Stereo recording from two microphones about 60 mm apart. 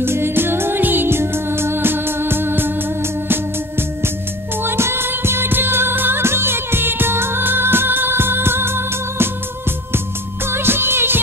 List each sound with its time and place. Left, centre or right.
0.0 s music: right